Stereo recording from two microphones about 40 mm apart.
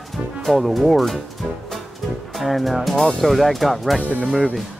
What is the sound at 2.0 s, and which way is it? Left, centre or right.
Music, centre.